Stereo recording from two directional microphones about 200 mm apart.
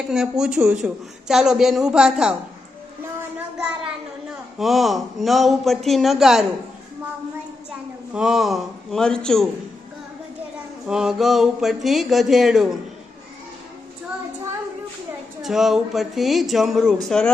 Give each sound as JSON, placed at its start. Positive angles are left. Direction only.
{"t": 0.0, "sound": "speech", "side_deg": -5}
{"t": 3.0, "sound": "a sound", "side_deg": -10}
{"t": 4.5, "sound": "speech", "side_deg": 0}
{"t": 8.1, "sound": "speech", "side_deg": -5}
{"t": 10.8, "sound": "speech", "side_deg": -5}
{"t": 15.4, "sound": "speech", "side_deg": 0}